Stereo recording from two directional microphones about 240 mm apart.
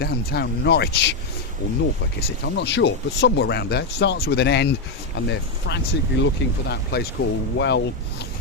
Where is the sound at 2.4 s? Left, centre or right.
Left.